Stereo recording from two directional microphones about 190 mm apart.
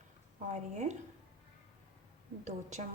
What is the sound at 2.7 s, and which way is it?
Speech, 40° right (ahead or behind).